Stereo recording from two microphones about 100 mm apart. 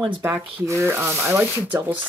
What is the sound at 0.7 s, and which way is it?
Speech, 25° right (ahead or behind).